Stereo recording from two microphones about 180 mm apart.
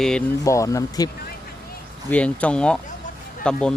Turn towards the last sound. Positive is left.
turn(degrees=5)  # may be behind; listen again after turning